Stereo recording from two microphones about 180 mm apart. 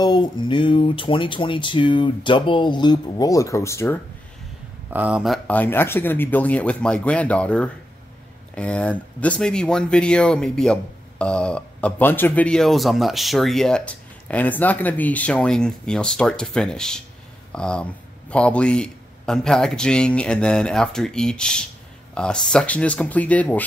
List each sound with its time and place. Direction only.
0.0 s speech: 25° left (ahead or behind)
4.9 s speech: 5° right (ahead or behind); by 23.6 s 10° left (ahead or behind)